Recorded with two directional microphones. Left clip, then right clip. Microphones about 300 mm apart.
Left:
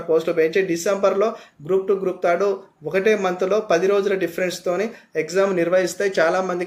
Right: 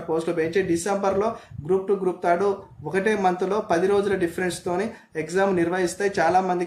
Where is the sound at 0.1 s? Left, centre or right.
Centre.